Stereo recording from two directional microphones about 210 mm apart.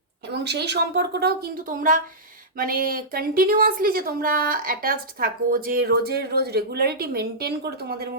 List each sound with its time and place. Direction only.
0.4 s speech: 55° right (ahead or behind)